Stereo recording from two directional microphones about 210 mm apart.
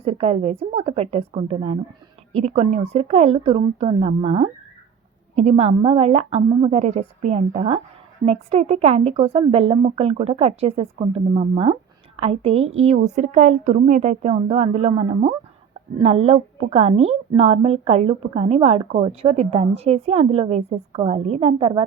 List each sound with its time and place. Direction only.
0.0 s a woman's voice: 30° right (ahead or behind)